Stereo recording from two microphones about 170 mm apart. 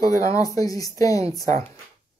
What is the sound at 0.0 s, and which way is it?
Speech, 20° left (ahead or behind).